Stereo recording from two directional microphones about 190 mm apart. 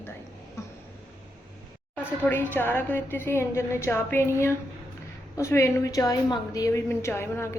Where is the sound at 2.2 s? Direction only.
10° left (ahead or behind).